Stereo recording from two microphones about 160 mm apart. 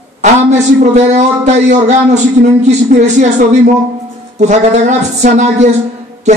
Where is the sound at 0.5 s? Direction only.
45° right (ahead or behind).